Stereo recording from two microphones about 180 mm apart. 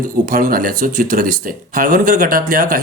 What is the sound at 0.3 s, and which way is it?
Speech, 50° right (ahead or behind).